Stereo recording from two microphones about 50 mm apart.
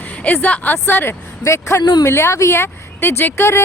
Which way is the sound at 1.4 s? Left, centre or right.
Left.